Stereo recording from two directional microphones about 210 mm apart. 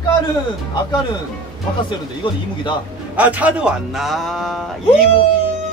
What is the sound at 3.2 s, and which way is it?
Speech, 5° right (ahead or behind).